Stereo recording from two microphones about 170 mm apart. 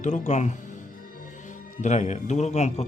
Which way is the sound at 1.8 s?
45° left (ahead or behind).